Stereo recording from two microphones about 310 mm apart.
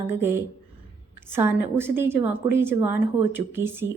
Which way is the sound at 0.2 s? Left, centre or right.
Centre.